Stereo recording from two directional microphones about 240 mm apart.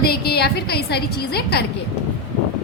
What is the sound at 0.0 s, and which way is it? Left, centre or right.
A woman's voice, left.